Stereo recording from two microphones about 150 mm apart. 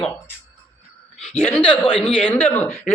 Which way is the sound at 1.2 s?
10° left (ahead or behind).